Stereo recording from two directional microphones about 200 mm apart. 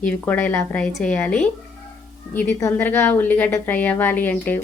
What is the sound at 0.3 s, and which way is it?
A woman's voice, 10° left (ahead or behind).